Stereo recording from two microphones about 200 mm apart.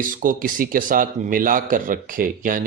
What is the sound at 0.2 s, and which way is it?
A man's voice, 45° right (ahead or behind).